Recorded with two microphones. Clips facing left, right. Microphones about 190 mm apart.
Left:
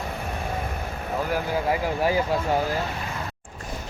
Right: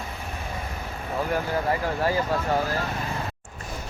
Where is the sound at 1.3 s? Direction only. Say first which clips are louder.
Left 1 dB; 15° left (ahead or behind).